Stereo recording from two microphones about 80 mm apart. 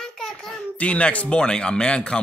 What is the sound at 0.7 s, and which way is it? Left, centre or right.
Speech, centre.